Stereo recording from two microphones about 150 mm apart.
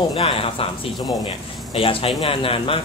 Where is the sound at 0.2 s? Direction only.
35° left (ahead or behind).